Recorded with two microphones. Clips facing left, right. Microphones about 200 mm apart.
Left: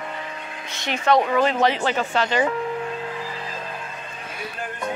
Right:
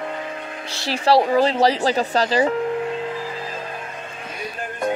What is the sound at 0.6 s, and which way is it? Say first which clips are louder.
Speech: right 2 dB; 30° right (ahead or behind).